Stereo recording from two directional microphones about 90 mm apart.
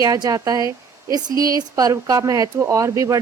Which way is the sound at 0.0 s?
45° right (ahead or behind).